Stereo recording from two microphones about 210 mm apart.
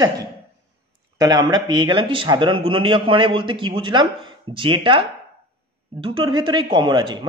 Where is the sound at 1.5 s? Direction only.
20° right (ahead or behind).